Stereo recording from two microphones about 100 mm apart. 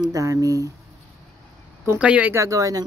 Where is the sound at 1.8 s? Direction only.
15° right (ahead or behind).